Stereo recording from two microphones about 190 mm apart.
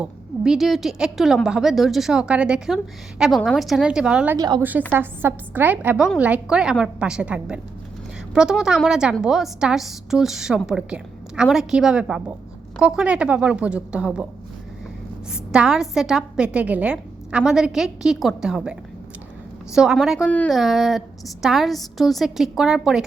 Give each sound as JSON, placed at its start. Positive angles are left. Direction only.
{"t": 0.0, "sound": "a woman's voice", "side_deg": 0}
{"t": 4.4, "sound": "a woman's voice", "side_deg": -20}
{"t": 4.9, "sound": "a woman's voice", "side_deg": -10}
{"t": 15.3, "sound": "a woman's voice", "side_deg": -5}